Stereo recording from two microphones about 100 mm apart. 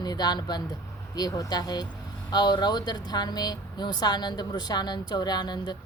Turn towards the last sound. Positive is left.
turn(degrees=45)  # may be behind; listen again after turning